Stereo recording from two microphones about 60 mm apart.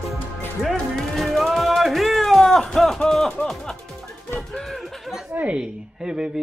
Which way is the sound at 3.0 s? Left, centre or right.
Centre.